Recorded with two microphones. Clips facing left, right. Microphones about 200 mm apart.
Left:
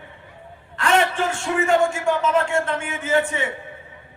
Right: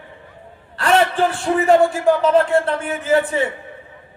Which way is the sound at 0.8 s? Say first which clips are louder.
Right 4 dB; 35° right (ahead or behind).